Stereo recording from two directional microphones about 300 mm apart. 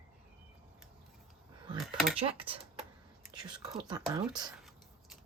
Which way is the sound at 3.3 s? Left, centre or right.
Centre.